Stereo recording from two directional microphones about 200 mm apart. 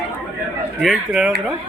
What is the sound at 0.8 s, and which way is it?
Speech, centre (ahead or behind).